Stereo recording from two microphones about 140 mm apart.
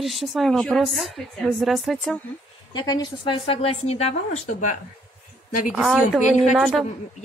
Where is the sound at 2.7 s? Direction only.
30° left (ahead or behind); by 4.8 s 60° left (ahead or behind).